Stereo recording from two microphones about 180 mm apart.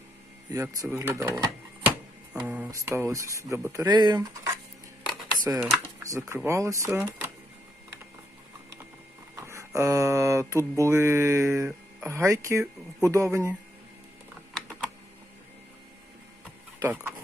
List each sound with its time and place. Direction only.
0.5 s speech: 15° right (ahead or behind)
2.3 s speech: 5° right (ahead or behind); by 4.3 s 25° right (ahead or behind)
5.5 s speech: 10° right (ahead or behind)
9.3 s a sound: 15° right (ahead or behind)
12.0 s speech: 15° right (ahead or behind)
16.8 s speech: 10° right (ahead or behind)